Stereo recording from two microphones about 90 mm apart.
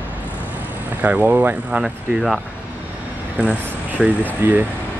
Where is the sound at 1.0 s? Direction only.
15° right (ahead or behind).